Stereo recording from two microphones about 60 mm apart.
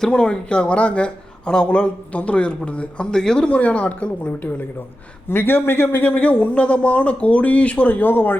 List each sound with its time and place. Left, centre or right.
0.0 s speech: centre
5.3 s a man's voice: left
6.1 s speech: left